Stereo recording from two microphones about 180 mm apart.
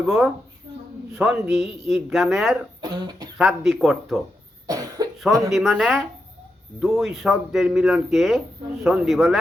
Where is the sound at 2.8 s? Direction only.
20° right (ahead or behind).